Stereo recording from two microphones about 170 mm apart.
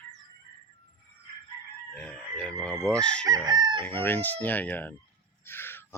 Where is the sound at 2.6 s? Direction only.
5° left (ahead or behind).